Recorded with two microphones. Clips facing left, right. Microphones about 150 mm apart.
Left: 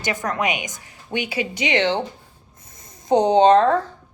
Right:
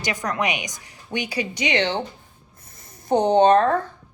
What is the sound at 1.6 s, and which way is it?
Speech, 50° left (ahead or behind).